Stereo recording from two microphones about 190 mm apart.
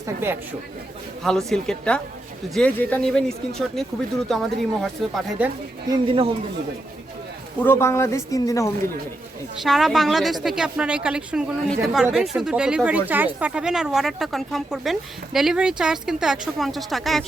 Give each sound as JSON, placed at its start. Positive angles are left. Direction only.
{"t": 0.0, "sound": "speech", "side_deg": -10}
{"t": 1.2, "sound": "speech", "side_deg": 0}
{"t": 5.9, "sound": "a man's voice", "side_deg": -30}
{"t": 7.6, "sound": "speech", "side_deg": 10}
{"t": 9.6, "sound": "speech", "side_deg": 0}